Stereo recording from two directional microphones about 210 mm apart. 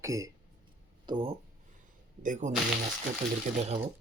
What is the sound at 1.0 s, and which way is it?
Speech, 25° right (ahead or behind).